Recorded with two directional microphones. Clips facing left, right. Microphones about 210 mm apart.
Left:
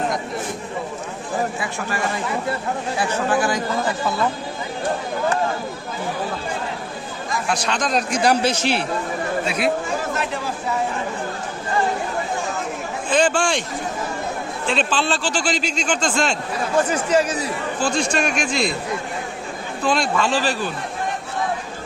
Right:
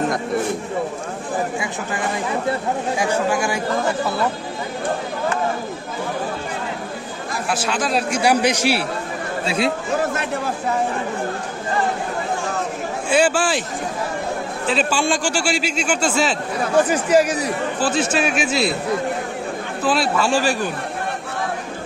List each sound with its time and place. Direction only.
1.5 s a man's voice: 15° right (ahead or behind)
3.0 s a man's voice: 10° right (ahead or behind)
7.4 s a man's voice: 5° right (ahead or behind)
9.5 s speech: 25° right (ahead or behind)
13.1 s a man's voice: 10° right (ahead or behind)
14.7 s a man's voice: 5° right (ahead or behind)
19.8 s a man's voice: 5° right (ahead or behind)